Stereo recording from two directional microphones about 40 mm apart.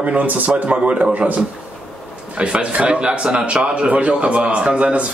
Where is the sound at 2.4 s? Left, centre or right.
Right.